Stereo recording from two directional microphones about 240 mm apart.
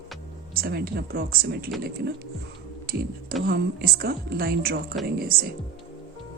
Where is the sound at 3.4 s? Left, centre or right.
Right.